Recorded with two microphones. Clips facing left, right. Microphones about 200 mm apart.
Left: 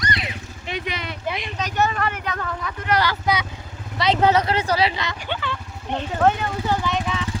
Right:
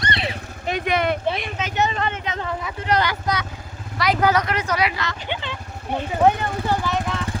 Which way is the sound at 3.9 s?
25° left (ahead or behind).